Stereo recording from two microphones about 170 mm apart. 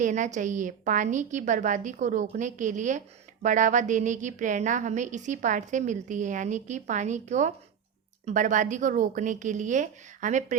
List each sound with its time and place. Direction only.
0.0 s a woman's voice: 45° right (ahead or behind)